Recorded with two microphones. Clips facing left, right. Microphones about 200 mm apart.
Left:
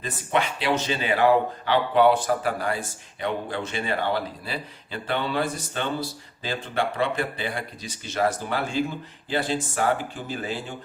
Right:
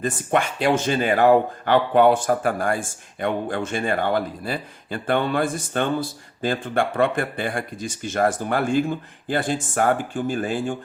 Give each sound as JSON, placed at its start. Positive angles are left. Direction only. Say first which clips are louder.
{"t": 0.0, "sound": "speech", "louder": "right 4 dB", "side_deg": -50}